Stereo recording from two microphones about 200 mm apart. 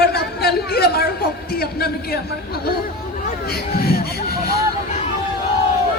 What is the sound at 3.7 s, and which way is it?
Speech, 50° left (ahead or behind).